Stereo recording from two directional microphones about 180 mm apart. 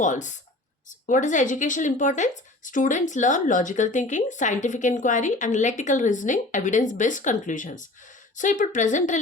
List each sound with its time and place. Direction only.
0.0 s speech: 45° left (ahead or behind)